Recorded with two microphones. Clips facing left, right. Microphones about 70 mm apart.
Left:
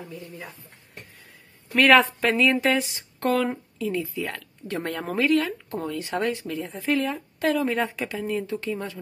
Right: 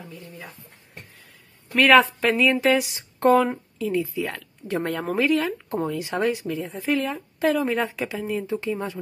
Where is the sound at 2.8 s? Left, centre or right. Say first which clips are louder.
Right 6 dB; right.